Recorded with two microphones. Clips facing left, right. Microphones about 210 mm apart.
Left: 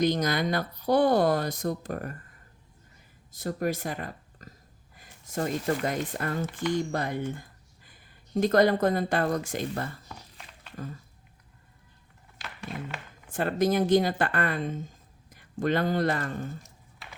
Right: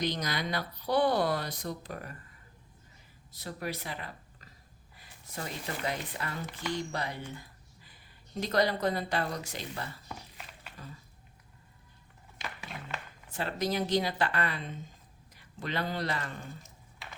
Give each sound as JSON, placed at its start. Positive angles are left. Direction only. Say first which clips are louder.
{"t": 0.0, "sound": "speech", "louder": "left 8 dB", "side_deg": 45}
{"t": 3.3, "sound": "speech", "louder": "left 8 dB", "side_deg": 45}
{"t": 10.1, "sound": "a sound", "louder": "right 1 dB", "side_deg": -10}
{"t": 13.3, "sound": "speech", "louder": "left 7 dB", "side_deg": 50}